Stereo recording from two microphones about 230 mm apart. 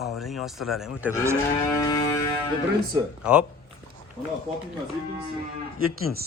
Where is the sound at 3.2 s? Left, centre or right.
Centre.